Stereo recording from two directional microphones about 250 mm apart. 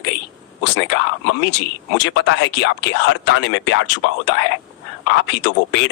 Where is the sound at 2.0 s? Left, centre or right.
Left.